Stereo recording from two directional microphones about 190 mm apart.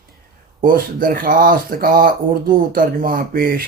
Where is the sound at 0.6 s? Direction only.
45° right (ahead or behind).